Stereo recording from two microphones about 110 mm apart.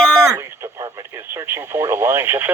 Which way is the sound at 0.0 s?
10° left (ahead or behind).